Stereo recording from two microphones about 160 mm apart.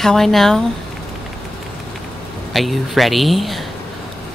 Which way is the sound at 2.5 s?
Centre (ahead or behind).